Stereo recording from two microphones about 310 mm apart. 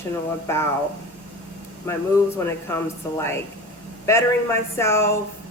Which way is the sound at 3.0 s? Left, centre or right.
Centre.